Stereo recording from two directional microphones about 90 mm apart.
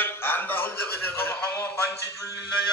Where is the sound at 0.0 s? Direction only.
25° left (ahead or behind).